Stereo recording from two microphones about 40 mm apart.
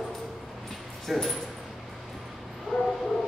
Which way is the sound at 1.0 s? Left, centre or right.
Centre.